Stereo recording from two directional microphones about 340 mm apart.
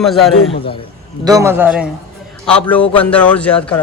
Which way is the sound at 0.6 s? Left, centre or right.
Centre.